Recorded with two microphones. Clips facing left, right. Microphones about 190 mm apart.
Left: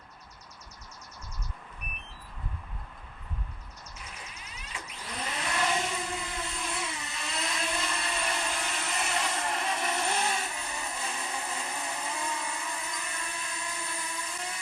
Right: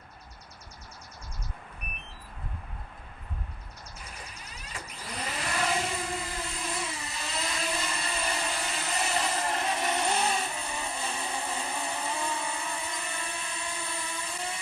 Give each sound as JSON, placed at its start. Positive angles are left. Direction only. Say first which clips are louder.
{"t": 5.1, "sound": "vehicle", "louder": "even", "side_deg": 0}
{"t": 9.3, "sound": "vehicle", "louder": "right 2 dB", "side_deg": -30}